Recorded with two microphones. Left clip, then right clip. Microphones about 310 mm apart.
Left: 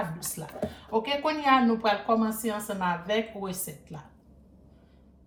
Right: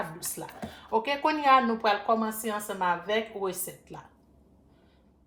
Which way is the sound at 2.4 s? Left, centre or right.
Right.